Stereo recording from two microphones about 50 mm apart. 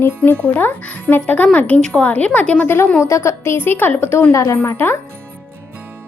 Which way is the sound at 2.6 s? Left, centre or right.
Left.